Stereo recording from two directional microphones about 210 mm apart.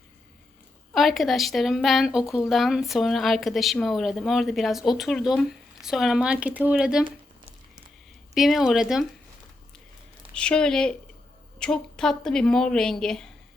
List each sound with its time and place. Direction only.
0.9 s speech: centre (ahead or behind)
8.4 s speech: centre (ahead or behind)
10.3 s speech: 5° left (ahead or behind)